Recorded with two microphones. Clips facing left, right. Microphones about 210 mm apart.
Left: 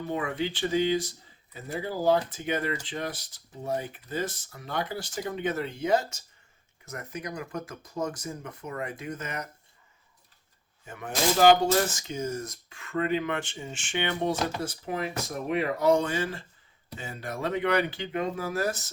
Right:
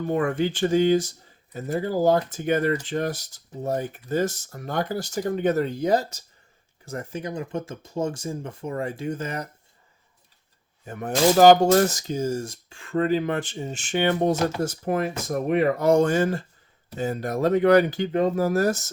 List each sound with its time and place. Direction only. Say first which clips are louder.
0.1 s speech: right 7 dB; 50° right (ahead or behind); by 9.5 s 30° right (ahead or behind)
10.8 s speech: right 7 dB; 40° right (ahead or behind)